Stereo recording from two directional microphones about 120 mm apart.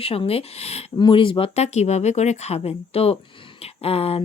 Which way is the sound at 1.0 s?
45° left (ahead or behind).